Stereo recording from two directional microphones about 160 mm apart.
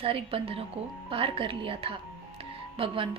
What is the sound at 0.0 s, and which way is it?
A woman's voice, 35° right (ahead or behind).